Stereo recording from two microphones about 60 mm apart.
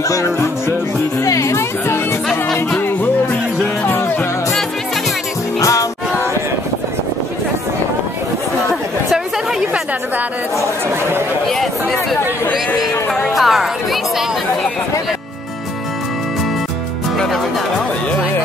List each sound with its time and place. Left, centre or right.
0.1 s speech: left
1.2 s music: left
3.8 s music: left
5.6 s music: left
13.3 s speech: centre